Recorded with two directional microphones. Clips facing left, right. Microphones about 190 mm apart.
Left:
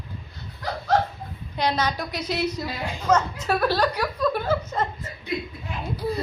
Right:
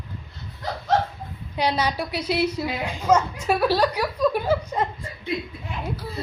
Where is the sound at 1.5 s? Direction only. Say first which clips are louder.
Right 1 dB; 10° right (ahead or behind).